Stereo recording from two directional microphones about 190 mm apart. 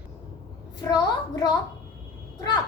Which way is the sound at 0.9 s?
20° left (ahead or behind).